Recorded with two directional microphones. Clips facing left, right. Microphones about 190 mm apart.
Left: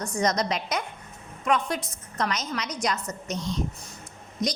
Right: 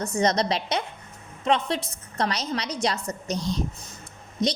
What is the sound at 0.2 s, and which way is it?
A woman's voice, 30° right (ahead or behind).